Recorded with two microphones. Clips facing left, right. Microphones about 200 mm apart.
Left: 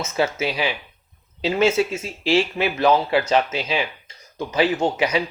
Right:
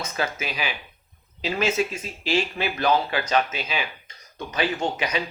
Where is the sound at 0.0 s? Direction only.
25° left (ahead or behind).